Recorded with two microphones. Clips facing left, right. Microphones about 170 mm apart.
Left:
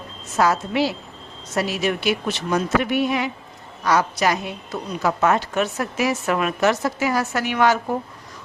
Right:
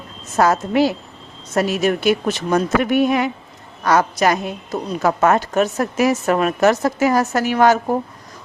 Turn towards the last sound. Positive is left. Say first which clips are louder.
# right 4 dB
turn(degrees=-40)  # may be behind; listen again after turning